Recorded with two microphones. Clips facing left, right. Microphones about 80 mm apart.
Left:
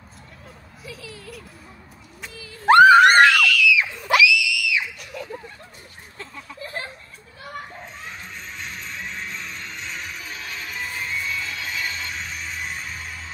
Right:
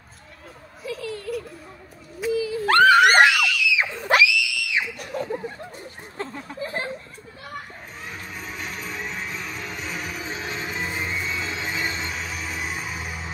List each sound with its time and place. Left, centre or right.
0.8 s a sound: centre
2.6 s screaming: centre
3.0 s screaming: centre
4.2 s screaming: right
8.4 s music: centre
10.2 s music: right
12.1 s music: centre